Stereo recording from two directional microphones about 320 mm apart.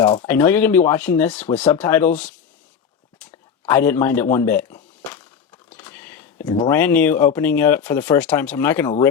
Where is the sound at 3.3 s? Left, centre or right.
Centre.